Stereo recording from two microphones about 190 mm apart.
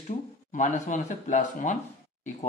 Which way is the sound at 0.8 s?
40° left (ahead or behind).